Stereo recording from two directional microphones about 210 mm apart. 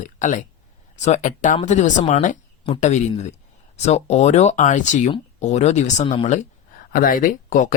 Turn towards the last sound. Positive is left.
turn(degrees=40)  # may be behind; listen again after turning